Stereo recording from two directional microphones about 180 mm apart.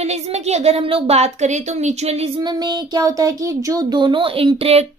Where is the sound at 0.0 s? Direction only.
35° right (ahead or behind).